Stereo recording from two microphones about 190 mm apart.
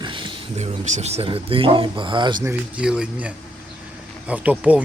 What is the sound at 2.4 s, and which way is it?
Speech, 10° right (ahead or behind).